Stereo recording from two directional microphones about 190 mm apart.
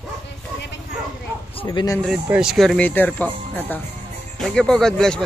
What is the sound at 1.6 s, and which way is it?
Speech, 20° left (ahead or behind).